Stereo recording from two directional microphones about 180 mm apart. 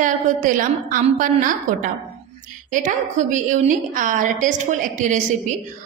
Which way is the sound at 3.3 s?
45° right (ahead or behind).